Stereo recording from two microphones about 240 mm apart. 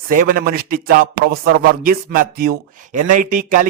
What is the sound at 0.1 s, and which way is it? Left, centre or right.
Speech, right.